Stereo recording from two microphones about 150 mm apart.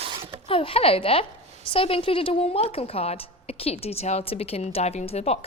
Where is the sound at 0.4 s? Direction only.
40° left (ahead or behind).